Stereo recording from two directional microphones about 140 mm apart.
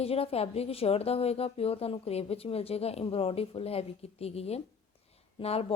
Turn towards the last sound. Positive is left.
turn(degrees=45)  # may be behind; listen again after turning